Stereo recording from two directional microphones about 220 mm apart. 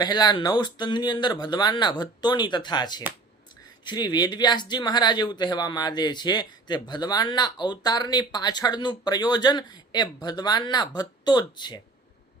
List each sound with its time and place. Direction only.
0.0 s speech: 20° left (ahead or behind)